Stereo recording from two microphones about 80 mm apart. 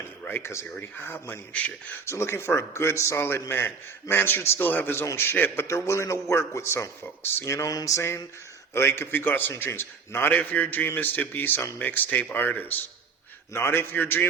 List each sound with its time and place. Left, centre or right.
0.3 s a man's voice: left
2.0 s a man's voice: left
5.6 s a man's voice: left